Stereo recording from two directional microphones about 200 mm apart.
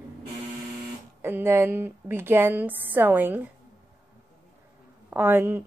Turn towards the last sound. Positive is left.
turn(degrees=-10)  # may be behind; listen again after turning